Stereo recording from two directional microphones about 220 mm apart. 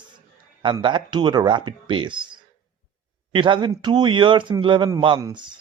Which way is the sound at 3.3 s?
20° right (ahead or behind).